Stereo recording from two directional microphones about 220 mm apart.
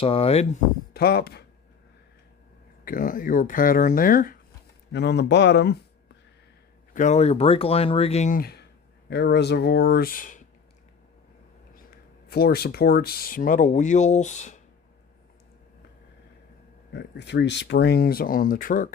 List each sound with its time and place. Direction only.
0.0 s speech: 25° left (ahead or behind)
0.9 s speech: 45° left (ahead or behind)
2.8 s speech: 40° left (ahead or behind)
4.9 s speech: 50° left (ahead or behind)
6.9 s speech: 35° left (ahead or behind)
12.3 s speech: 45° left (ahead or behind)
16.9 s speech: 50° left (ahead or behind)